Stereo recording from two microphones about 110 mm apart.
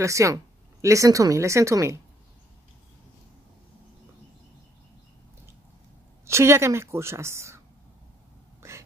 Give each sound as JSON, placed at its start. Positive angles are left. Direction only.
{"t": 0.0, "sound": "speech", "side_deg": -30}
{"t": 6.2, "sound": "speech", "side_deg": -25}